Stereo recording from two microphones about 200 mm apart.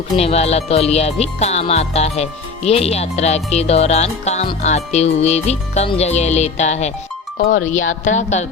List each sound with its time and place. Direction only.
0.2 s speech: 30° left (ahead or behind)